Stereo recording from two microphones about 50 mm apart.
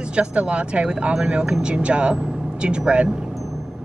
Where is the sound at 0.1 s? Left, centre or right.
Right.